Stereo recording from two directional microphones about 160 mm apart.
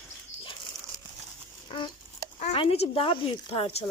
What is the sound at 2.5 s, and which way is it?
Speech, 35° left (ahead or behind).